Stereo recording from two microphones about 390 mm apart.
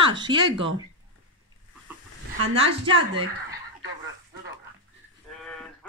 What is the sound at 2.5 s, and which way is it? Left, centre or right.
A woman's voice, centre.